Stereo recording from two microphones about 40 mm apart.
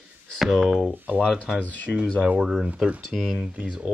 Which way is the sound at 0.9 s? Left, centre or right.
Right.